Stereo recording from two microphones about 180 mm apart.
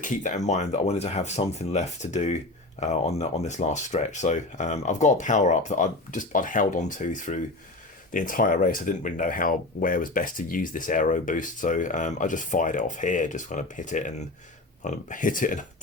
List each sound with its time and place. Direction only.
0.0 s speech: 45° left (ahead or behind)